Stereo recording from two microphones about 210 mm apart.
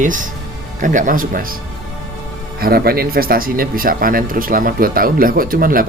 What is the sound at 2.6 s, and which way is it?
Speech, 45° right (ahead or behind).